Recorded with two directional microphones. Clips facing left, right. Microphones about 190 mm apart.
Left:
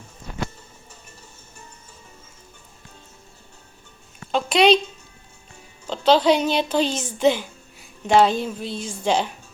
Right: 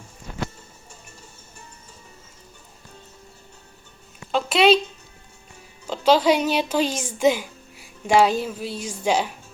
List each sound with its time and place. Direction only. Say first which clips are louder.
4.3 s a woman's voice: left 1 dB; centre (ahead or behind)
5.9 s a woman's voice: left 1 dB; 10° right (ahead or behind)